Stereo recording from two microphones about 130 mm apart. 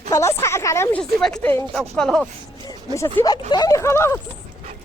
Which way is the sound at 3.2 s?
30° left (ahead or behind).